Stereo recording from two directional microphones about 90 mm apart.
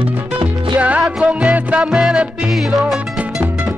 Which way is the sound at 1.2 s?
15° right (ahead or behind).